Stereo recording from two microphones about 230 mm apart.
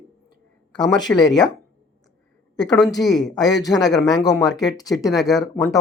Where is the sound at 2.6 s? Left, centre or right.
Centre.